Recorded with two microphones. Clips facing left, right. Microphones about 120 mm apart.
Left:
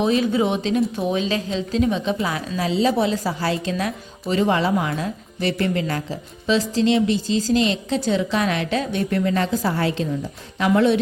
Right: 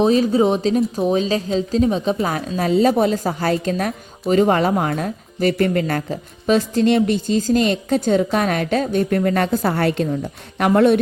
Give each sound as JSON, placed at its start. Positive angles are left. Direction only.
{"t": 0.0, "sound": "speech", "side_deg": -35}